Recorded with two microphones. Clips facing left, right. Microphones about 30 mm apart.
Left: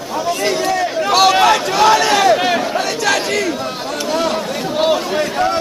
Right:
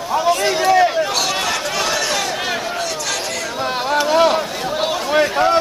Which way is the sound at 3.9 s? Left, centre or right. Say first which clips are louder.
Right 5 dB; centre.